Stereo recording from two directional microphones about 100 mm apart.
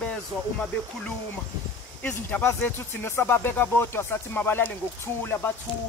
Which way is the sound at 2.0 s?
15° left (ahead or behind).